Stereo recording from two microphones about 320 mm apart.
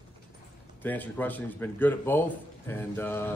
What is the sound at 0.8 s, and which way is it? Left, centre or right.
A man's voice, centre.